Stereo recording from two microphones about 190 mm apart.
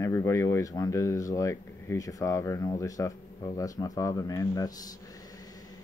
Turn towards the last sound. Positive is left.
turn(degrees=20)  # may be behind; listen again after turning